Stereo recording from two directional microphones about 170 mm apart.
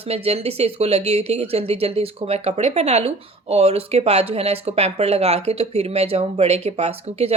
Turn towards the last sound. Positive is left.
turn(degrees=-35)  # may be behind; listen again after turning